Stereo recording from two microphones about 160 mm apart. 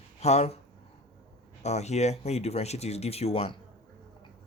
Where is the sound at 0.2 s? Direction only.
40° left (ahead or behind).